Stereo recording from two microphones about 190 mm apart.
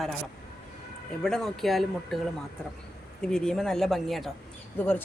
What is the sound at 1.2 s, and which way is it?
Speech, 5° left (ahead or behind).